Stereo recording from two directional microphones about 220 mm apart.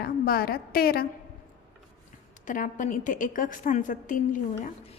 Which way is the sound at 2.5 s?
35° left (ahead or behind).